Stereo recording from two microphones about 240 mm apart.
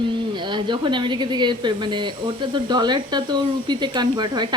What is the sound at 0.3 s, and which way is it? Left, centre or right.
Speech, centre.